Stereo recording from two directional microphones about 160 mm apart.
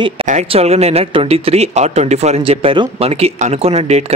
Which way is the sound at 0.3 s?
45° right (ahead or behind).